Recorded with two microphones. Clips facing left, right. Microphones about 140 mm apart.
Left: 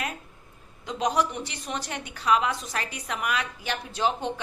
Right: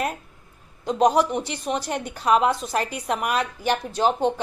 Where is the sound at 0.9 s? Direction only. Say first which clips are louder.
Right 7 dB; 45° right (ahead or behind).